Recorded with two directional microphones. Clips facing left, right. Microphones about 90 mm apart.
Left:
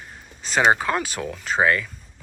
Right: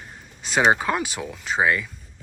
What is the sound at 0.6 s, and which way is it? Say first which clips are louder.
Speech: even; 20° right (ahead or behind).